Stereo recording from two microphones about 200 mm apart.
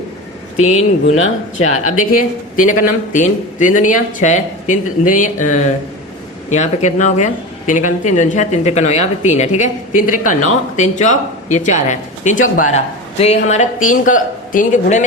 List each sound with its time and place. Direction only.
0.5 s speech: 35° left (ahead or behind)
1.1 s speech: 90° left
2.0 s speech: 40° left (ahead or behind)